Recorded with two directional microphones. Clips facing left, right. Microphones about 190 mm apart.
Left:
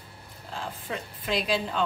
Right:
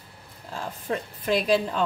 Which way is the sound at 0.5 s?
45° right (ahead or behind).